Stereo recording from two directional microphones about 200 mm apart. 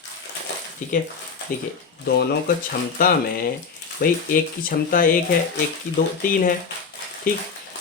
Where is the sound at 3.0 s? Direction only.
45° left (ahead or behind).